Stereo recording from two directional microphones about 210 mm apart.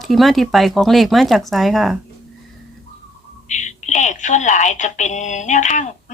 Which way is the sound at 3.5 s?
35° left (ahead or behind).